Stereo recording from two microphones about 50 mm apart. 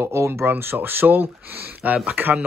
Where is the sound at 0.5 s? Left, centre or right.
Right.